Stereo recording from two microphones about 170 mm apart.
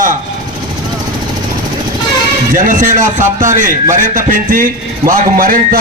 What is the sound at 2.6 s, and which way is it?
A man's voice, 50° right (ahead or behind).